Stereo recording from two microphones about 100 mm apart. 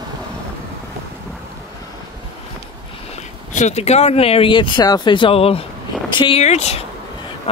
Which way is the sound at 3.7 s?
90° left.